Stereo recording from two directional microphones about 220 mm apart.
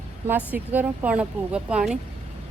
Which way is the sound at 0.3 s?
10° right (ahead or behind).